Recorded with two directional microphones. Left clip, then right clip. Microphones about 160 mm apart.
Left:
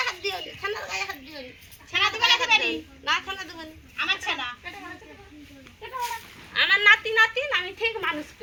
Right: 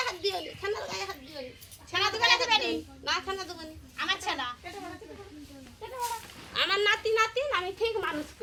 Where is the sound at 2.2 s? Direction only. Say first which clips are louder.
Left 3 dB; 35° right (ahead or behind).